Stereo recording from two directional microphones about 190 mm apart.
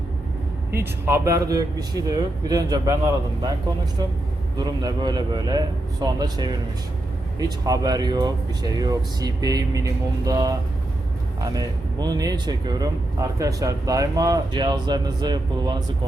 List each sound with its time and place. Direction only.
0.7 s a man's voice: 15° right (ahead or behind)
4.5 s a man's voice: 20° right (ahead or behind)